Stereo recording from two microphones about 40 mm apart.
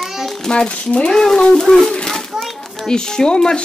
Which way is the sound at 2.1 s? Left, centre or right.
Centre.